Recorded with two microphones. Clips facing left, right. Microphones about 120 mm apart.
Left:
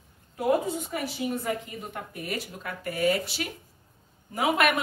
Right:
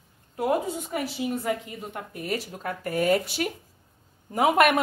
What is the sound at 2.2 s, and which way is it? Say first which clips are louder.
A woman's voice: right 5 dB; 40° right (ahead or behind).